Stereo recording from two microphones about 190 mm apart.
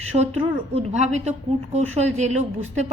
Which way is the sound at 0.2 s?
30° right (ahead or behind).